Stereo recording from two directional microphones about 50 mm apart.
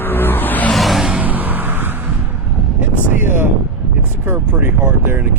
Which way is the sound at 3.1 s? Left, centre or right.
Right.